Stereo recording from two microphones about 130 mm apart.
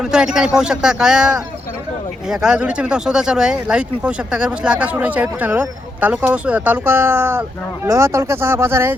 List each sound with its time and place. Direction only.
0.0 s speech: 5° right (ahead or behind)